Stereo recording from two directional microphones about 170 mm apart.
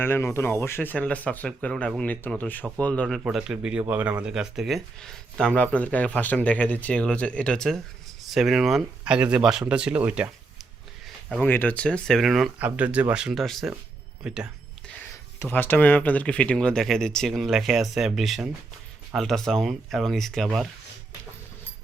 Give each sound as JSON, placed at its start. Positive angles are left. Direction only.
{"t": 0.0, "sound": "speech", "side_deg": 10}
{"t": 11.3, "sound": "speech", "side_deg": 10}
{"t": 15.4, "sound": "speech", "side_deg": 10}